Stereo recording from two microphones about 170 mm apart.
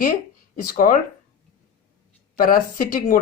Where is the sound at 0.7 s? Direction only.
50° left (ahead or behind).